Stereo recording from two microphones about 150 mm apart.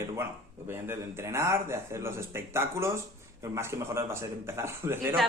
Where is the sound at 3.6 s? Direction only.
20° right (ahead or behind).